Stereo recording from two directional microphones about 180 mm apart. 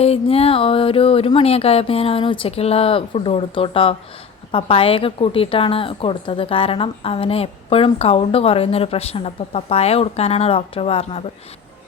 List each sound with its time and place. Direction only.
0.0 s a woman's voice: 35° left (ahead or behind)